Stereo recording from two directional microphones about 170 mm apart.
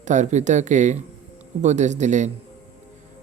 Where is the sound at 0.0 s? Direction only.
45° right (ahead or behind).